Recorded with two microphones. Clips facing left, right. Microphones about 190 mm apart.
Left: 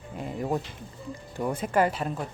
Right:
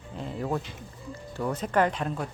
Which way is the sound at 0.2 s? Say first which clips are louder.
Left 1 dB; 10° left (ahead or behind).